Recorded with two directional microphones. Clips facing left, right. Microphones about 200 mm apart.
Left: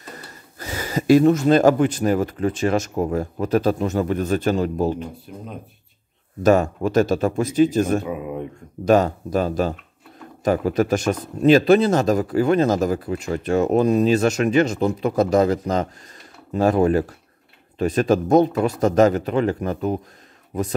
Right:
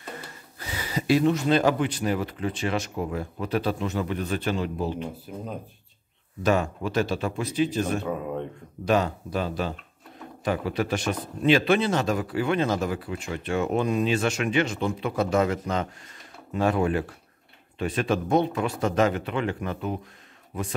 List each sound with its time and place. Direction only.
0.1 s speech: 45° left (ahead or behind)
6.4 s speech: 45° left (ahead or behind)
8.0 s speech: 10° left (ahead or behind)
8.8 s speech: 45° left (ahead or behind)